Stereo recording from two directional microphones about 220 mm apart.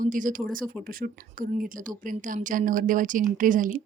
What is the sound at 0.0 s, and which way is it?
A woman's voice, 35° right (ahead or behind).